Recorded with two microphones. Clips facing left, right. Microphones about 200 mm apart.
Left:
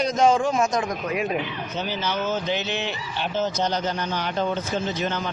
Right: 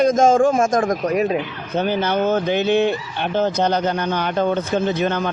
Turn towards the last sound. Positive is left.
turn(degrees=-55)  # may be behind; listen again after turning